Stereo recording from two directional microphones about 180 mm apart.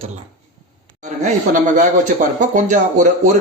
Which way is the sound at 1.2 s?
45° right (ahead or behind).